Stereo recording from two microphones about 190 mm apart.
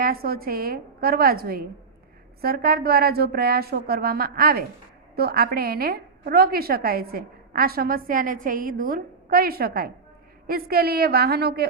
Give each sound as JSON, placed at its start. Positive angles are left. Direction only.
{"t": 0.0, "sound": "a woman's voice", "side_deg": -50}